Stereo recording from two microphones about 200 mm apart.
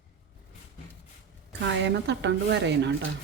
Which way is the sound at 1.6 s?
60° right (ahead or behind).